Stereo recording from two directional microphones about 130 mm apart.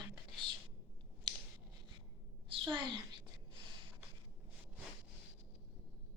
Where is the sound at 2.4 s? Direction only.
40° right (ahead or behind).